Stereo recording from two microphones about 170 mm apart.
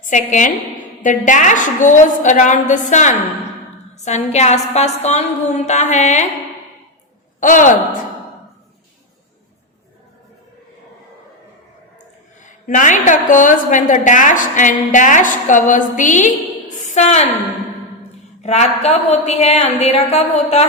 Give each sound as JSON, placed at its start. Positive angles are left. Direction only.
{"t": 0.0, "sound": "a woman's voice", "side_deg": 45}
{"t": 7.3, "sound": "speech", "side_deg": 50}
{"t": 12.4, "sound": "a woman's voice", "side_deg": 50}
{"t": 18.4, "sound": "a woman's voice", "side_deg": 40}